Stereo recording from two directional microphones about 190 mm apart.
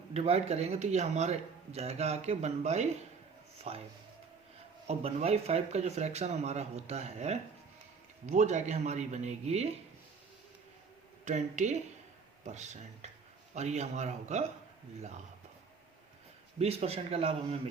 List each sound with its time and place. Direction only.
0.1 s a man's voice: 35° right (ahead or behind)
4.9 s a man's voice: 35° right (ahead or behind)
11.3 s a man's voice: 40° right (ahead or behind)
16.6 s a man's voice: 30° right (ahead or behind)